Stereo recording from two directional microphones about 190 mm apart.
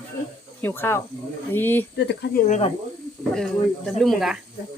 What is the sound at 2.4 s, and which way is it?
Speech, 35° left (ahead or behind).